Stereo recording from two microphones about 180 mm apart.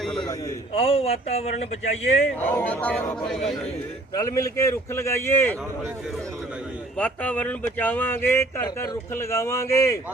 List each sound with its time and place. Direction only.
0.0 s a sound: 5° left (ahead or behind)
0.7 s speech: 30° left (ahead or behind)
2.4 s speech: 10° left (ahead or behind)
4.1 s speech: 20° left (ahead or behind)
6.9 s speech: 5° left (ahead or behind)